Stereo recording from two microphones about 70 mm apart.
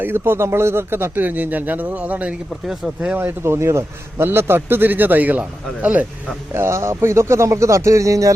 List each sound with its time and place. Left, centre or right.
0.0 s speech: right; by 3.0 s centre
3.2 s speech: right; by 6.1 s centre
6.5 s speech: right